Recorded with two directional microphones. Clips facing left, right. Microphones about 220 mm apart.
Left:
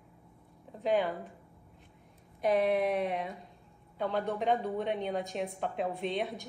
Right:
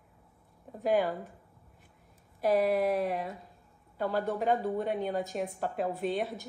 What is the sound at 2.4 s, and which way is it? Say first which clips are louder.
A woman's voice: right 1 dB; centre (ahead or behind).